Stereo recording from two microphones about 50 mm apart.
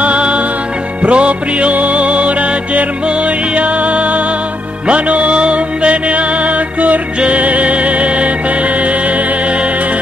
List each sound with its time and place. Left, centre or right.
0.0 s music: right